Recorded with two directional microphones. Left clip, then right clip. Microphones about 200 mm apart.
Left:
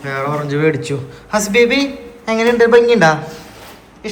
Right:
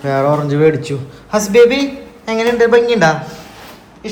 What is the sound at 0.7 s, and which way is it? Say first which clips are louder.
A man's voice: right 1 dB; 10° right (ahead or behind).